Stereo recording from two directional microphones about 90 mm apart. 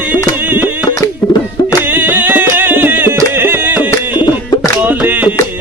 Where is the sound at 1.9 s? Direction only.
20° right (ahead or behind).